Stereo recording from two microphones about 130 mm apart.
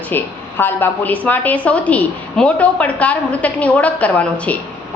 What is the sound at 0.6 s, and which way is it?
A woman's voice, 15° left (ahead or behind).